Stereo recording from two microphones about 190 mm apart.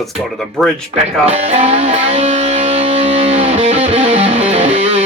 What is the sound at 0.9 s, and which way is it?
Music, 35° right (ahead or behind).